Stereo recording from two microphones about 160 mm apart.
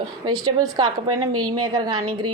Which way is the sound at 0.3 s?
25° right (ahead or behind).